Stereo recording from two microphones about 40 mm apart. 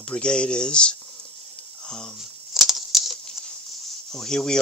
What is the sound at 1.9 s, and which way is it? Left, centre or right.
Speech, centre.